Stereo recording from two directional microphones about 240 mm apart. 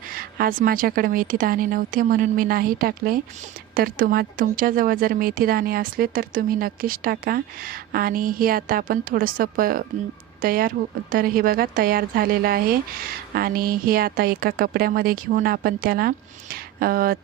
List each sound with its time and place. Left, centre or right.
0.1 s a woman's voice: right